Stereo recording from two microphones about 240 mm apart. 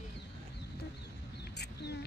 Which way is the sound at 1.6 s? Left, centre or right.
Left.